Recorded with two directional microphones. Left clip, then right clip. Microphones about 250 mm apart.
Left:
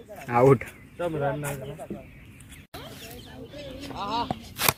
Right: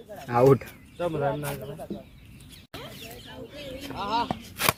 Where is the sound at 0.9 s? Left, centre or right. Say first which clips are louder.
Right 1 dB; centre.